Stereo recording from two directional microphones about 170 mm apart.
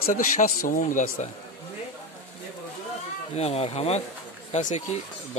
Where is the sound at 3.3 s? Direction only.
35° left (ahead or behind).